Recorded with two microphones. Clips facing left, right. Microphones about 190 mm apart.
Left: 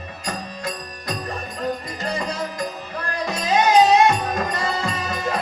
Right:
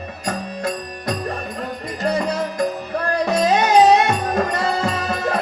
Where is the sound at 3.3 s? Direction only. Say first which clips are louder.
Right 1 dB; 50° right (ahead or behind).